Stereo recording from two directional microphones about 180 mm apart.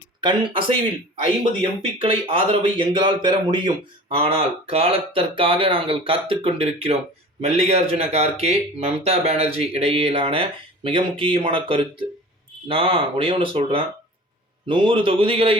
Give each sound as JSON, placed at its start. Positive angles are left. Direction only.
{"t": 0.2, "sound": "a man's voice", "side_deg": -25}
{"t": 2.0, "sound": "a man's voice", "side_deg": -30}